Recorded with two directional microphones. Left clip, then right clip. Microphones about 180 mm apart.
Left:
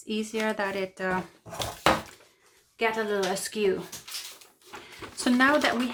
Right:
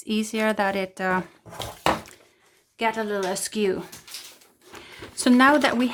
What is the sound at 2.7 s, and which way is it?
Speech, 45° right (ahead or behind).